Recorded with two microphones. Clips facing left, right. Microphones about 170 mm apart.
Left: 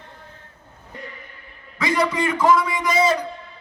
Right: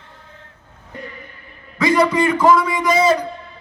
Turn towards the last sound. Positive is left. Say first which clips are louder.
# right 4 dB
turn(degrees=-35)  # may be behind; listen again after turning